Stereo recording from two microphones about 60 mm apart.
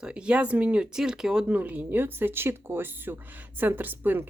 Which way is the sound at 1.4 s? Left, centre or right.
Right.